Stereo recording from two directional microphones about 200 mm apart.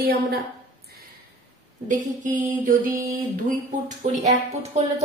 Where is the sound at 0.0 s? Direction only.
50° right (ahead or behind).